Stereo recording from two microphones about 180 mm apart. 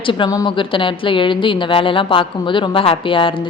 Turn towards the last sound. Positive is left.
turn(degrees=30)  # may be behind; listen again after turning